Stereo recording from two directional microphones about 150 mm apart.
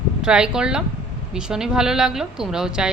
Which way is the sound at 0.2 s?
5° right (ahead or behind).